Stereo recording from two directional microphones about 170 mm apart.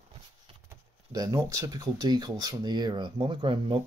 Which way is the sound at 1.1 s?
20° right (ahead or behind).